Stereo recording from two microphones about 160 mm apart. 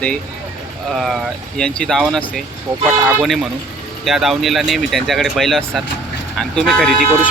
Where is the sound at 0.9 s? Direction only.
Centre (ahead or behind).